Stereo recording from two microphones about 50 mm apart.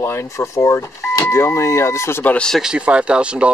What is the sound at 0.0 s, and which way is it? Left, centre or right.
Speech, left.